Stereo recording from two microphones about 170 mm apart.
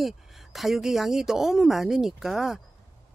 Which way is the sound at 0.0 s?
Centre (ahead or behind).